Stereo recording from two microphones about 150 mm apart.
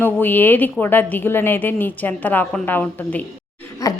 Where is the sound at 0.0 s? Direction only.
15° left (ahead or behind).